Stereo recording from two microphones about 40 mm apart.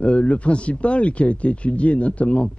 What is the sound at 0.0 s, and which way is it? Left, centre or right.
Speech, left.